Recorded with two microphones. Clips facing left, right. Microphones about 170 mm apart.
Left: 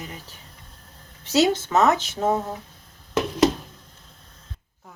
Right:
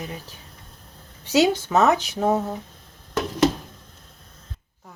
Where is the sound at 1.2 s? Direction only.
15° right (ahead or behind).